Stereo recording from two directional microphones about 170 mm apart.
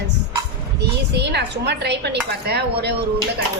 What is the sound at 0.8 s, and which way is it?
Speech, 80° right.